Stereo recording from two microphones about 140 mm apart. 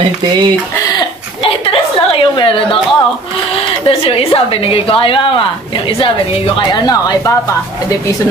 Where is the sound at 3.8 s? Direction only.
45° left (ahead or behind).